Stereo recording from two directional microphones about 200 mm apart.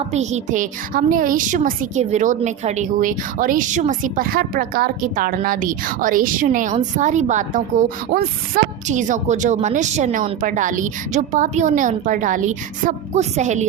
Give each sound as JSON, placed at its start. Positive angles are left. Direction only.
{"t": 0.1, "sound": "a woman's voice", "side_deg": -35}